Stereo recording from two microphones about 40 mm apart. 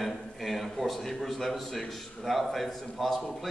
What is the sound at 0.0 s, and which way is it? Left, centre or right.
A man's voice, centre.